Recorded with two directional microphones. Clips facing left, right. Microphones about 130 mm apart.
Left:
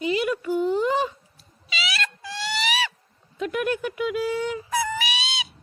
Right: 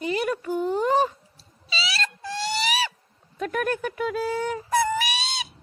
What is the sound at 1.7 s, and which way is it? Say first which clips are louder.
Dog: even; 35° right (ahead or behind).